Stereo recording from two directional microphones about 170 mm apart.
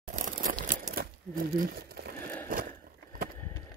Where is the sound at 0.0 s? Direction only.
55° right (ahead or behind).